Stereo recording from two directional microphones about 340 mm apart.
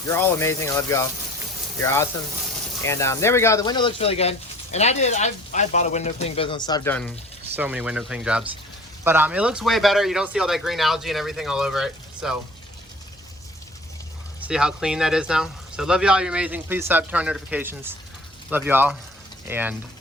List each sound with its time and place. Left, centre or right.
0.1 s speech: centre
7.5 s speech: centre
14.4 s speech: centre